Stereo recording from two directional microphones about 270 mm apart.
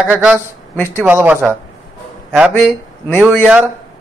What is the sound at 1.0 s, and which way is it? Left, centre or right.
A man's voice, centre.